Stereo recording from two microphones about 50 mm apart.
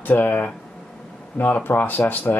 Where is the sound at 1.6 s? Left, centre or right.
Left.